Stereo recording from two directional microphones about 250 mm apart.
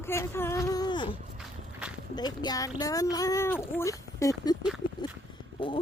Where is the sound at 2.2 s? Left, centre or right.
Centre.